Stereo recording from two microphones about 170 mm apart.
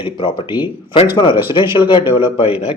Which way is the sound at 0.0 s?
30° left (ahead or behind).